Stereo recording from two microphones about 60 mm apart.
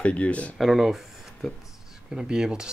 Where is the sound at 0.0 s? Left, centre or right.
Left.